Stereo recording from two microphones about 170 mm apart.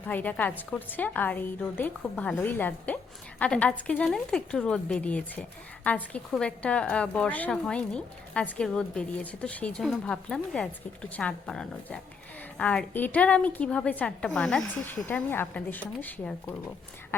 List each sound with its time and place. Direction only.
0.1 s a woman's voice: 10° left (ahead or behind)